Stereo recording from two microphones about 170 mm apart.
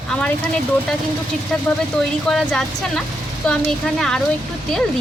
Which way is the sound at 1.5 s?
5° left (ahead or behind).